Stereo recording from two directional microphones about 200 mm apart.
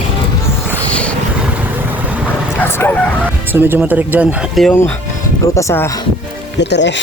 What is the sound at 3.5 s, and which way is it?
Speech, 10° right (ahead or behind).